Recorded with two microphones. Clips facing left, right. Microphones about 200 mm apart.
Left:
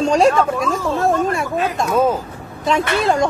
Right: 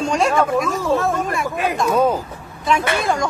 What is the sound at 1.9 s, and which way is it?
Speech, centre (ahead or behind).